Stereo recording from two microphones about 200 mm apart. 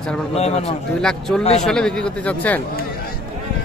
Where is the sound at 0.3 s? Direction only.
30° left (ahead or behind).